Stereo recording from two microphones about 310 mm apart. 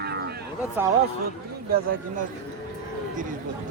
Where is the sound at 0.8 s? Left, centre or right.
Centre.